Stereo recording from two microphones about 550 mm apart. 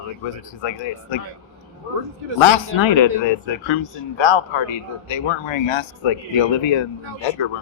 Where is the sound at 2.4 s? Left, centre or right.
Left.